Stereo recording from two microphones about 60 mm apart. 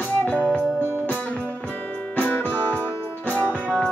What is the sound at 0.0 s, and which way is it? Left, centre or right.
Music, left.